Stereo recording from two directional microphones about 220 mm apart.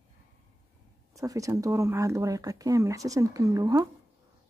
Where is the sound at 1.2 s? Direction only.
15° right (ahead or behind).